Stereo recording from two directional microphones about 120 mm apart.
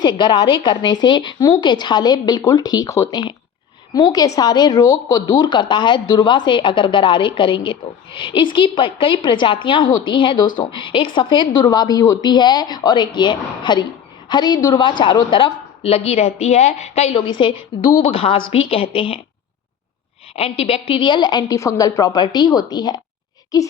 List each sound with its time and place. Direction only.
0.0 s a woman's voice: 40° left (ahead or behind); by 17.2 s 65° left (ahead or behind)
17.2 s a woman's voice: 45° left (ahead or behind)
20.3 s speech: 55° left (ahead or behind); by 23.7 s 30° left (ahead or behind)